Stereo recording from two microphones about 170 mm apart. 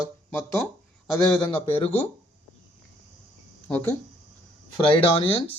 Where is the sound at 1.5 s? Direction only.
35° left (ahead or behind).